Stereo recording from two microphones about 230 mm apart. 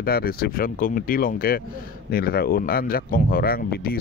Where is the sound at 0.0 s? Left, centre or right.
Left.